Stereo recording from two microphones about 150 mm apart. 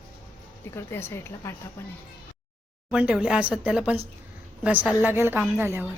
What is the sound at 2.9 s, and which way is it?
A woman's voice, 5° right (ahead or behind).